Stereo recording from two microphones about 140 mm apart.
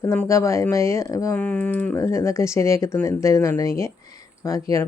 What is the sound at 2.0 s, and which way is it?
Speech, 20° left (ahead or behind).